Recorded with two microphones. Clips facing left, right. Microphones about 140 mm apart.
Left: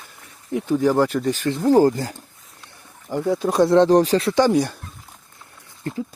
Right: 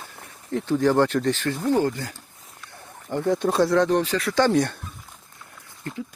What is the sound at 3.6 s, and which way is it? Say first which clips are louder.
Speech: left 8 dB; 25° left (ahead or behind).